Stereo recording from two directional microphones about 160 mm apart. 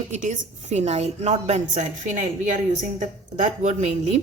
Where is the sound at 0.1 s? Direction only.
45° right (ahead or behind).